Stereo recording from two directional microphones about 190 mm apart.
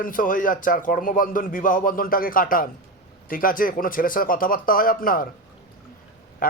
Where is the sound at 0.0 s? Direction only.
45° left (ahead or behind).